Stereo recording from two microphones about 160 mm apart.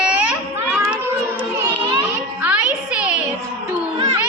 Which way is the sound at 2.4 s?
10° right (ahead or behind).